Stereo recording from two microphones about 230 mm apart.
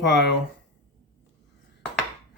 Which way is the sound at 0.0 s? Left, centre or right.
Left.